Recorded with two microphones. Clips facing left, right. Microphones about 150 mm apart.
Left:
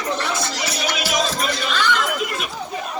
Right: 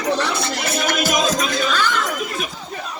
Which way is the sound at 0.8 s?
50° right (ahead or behind).